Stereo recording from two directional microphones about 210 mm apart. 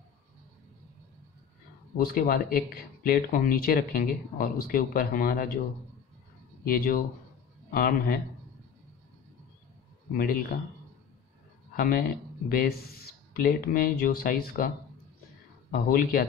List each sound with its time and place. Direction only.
2.0 s speech: 45° left (ahead or behind)
6.6 s speech: 45° left (ahead or behind)
10.1 s speech: 45° left (ahead or behind)
11.7 s speech: 45° left (ahead or behind)
15.7 s speech: 45° left (ahead or behind)